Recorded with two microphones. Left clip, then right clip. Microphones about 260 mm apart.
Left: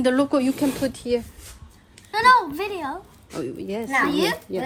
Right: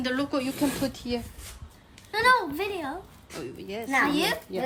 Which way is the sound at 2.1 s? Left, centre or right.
Centre.